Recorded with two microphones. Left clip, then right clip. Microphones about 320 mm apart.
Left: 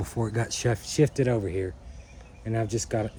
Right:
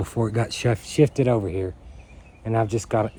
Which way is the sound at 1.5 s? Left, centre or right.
Right.